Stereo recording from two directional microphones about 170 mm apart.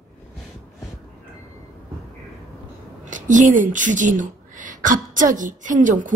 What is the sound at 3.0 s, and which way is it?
Speech, 50° right (ahead or behind).